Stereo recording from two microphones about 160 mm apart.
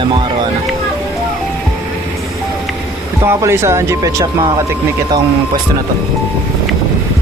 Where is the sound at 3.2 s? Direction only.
15° right (ahead or behind).